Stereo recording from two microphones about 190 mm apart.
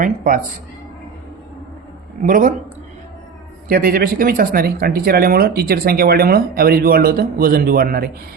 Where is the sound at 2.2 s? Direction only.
45° right (ahead or behind).